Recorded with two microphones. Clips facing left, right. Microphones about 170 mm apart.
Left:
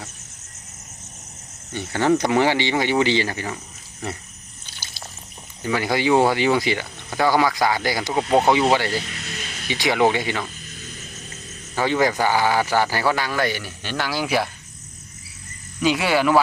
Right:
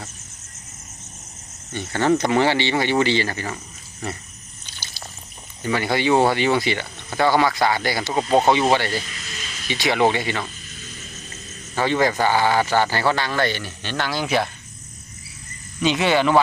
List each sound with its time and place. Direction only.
1.7 s speech: 15° left (ahead or behind)
5.6 s speech: 10° left (ahead or behind)
9.0 s music: 60° left (ahead or behind)
9.6 s speech: 15° left (ahead or behind)
11.8 s speech: 10° left (ahead or behind)
15.8 s speech: 10° left (ahead or behind)